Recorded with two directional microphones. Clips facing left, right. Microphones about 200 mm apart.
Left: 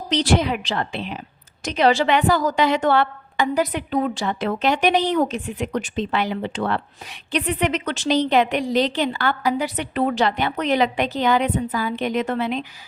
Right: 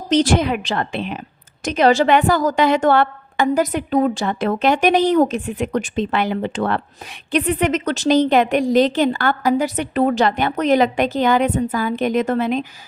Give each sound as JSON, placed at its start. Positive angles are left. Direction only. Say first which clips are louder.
{"t": 0.1, "sound": "a woman's voice", "louder": "right 4 dB", "side_deg": -45}